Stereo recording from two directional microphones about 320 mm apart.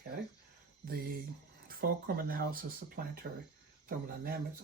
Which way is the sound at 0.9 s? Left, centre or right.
Right.